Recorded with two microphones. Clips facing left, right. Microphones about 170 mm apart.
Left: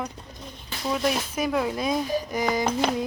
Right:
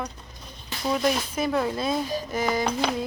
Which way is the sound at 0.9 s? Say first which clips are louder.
Right 1 dB; 10° left (ahead or behind).